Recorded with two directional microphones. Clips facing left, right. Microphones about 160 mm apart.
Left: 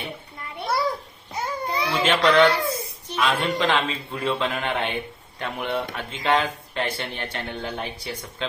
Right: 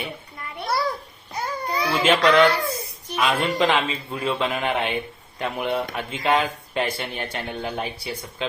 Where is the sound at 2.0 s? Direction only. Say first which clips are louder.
Right 1 dB; 5° right (ahead or behind).